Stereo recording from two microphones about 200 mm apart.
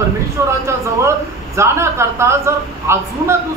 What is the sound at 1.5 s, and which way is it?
A man's voice, 15° right (ahead or behind).